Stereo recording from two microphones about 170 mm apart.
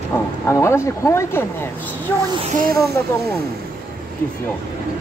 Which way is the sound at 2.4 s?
50° right (ahead or behind).